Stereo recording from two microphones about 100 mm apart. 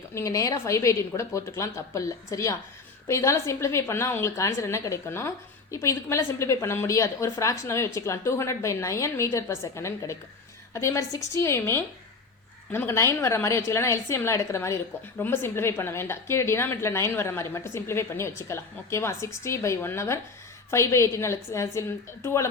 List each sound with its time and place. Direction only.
0.1 s a woman's voice: 30° left (ahead or behind)